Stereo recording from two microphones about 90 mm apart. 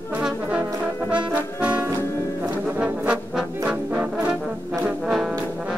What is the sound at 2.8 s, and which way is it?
Brass instrument, 15° right (ahead or behind).